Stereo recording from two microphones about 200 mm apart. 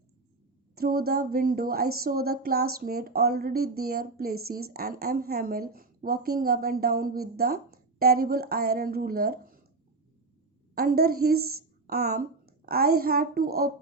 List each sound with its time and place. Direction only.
0.8 s speech: 50° right (ahead or behind)
10.8 s a child's voice: 50° right (ahead or behind)